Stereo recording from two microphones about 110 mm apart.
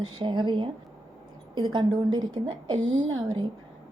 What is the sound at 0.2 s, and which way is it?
A woman's voice, 45° right (ahead or behind).